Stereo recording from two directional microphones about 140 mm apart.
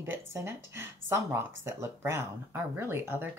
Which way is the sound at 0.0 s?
15° right (ahead or behind).